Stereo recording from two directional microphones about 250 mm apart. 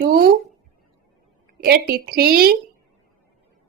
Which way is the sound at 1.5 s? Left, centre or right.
Right.